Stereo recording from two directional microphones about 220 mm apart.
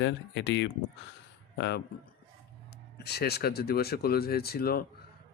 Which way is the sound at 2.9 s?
50° left (ahead or behind).